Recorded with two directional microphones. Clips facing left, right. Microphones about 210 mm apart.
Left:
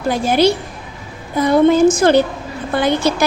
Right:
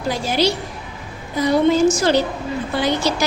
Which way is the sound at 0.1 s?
55° left (ahead or behind).